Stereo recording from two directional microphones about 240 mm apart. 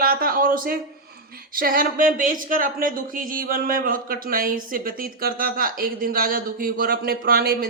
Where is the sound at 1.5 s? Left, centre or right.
Right.